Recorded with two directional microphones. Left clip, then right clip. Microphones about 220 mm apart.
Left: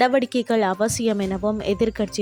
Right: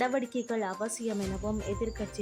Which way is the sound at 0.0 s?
35° left (ahead or behind).